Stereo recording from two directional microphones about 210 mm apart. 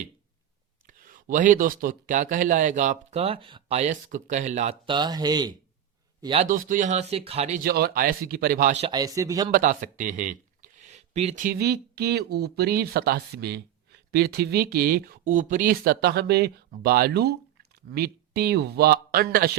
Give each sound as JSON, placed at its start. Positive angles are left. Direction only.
{"t": 0.9, "sound": "speech", "side_deg": -40}
{"t": 6.2, "sound": "speech", "side_deg": -30}
{"t": 7.6, "sound": "speech", "side_deg": -45}
{"t": 8.9, "sound": "speech", "side_deg": -15}
{"t": 9.5, "sound": "speech", "side_deg": -40}